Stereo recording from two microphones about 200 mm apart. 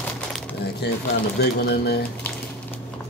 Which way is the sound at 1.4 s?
55° left (ahead or behind).